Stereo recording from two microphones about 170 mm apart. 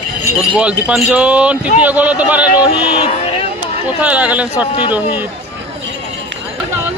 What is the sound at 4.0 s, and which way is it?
Speech, 10° right (ahead or behind).